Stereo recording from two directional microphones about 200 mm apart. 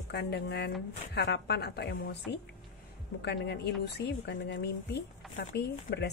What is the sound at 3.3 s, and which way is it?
A woman's voice, 55° left (ahead or behind).